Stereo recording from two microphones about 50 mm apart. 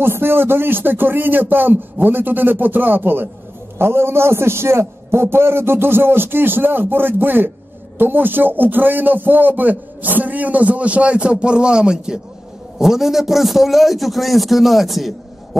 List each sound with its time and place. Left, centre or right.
0.0 s a man's voice: right
3.7 s a man's voice: right; by 15.1 s centre